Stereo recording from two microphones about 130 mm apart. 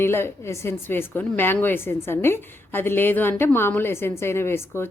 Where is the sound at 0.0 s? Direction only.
20° left (ahead or behind).